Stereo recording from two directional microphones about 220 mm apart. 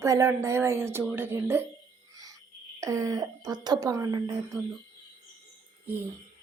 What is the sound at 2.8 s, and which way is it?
A woman's voice, 15° right (ahead or behind).